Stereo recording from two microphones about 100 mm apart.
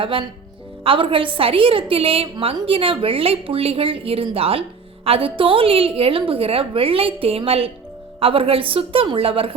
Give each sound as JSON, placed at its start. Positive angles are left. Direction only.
{"t": 0.0, "sound": "a woman's voice", "side_deg": -60}